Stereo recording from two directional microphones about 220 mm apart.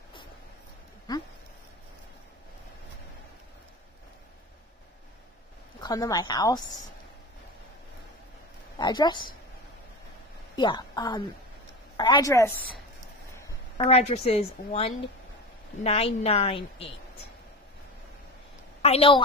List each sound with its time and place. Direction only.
1.1 s speech: 20° left (ahead or behind)
5.8 s speech: 15° left (ahead or behind)
8.7 s a woman's voice: 20° left (ahead or behind)
10.5 s a woman's voice: 20° left (ahead or behind)
13.7 s a woman's voice: 25° left (ahead or behind)
18.8 s a woman's voice: 25° left (ahead or behind)